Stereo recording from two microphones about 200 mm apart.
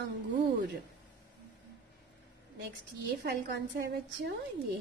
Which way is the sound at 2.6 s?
55° right (ahead or behind).